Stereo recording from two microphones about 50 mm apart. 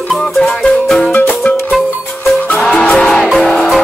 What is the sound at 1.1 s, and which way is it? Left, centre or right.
Music, left.